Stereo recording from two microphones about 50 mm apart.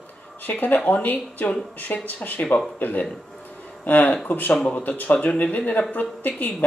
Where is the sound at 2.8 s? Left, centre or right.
Left.